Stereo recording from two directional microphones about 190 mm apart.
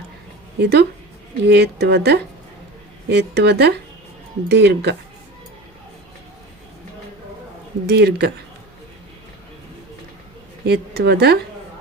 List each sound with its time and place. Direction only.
0.6 s speech: 60° right (ahead or behind)
7.9 s speech: 60° right (ahead or behind)
10.7 s speech: 60° right (ahead or behind)